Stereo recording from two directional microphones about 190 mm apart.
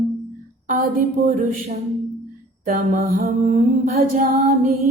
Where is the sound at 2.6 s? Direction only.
45° right (ahead or behind).